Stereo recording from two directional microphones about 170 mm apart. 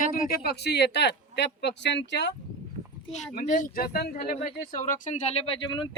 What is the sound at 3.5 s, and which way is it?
Speech, 50° left (ahead or behind).